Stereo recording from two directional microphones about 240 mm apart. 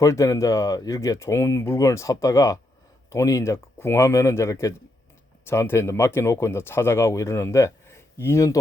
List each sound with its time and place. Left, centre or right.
0.0 s speech: centre